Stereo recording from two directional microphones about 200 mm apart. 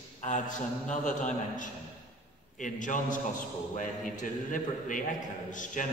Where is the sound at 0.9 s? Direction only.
40° left (ahead or behind).